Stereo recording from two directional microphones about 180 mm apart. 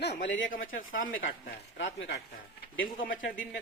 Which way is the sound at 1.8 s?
90° left.